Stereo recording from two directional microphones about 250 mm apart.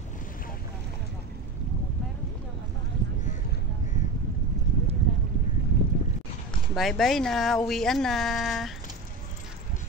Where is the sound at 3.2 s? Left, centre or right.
Left.